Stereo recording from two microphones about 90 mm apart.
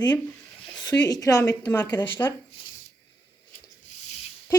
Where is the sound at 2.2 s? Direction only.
25° left (ahead or behind).